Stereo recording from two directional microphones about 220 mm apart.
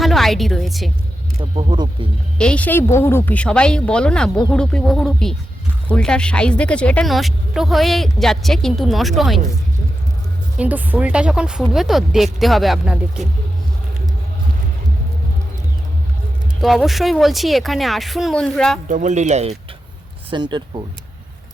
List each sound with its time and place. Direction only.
0.0 s a woman's voice: centre (ahead or behind)
1.4 s speech: 25° right (ahead or behind)
2.4 s speech: 5° left (ahead or behind)
10.6 s speech: 5° right (ahead or behind)
16.6 s speech: centre (ahead or behind)
18.9 s speech: 35° right (ahead or behind)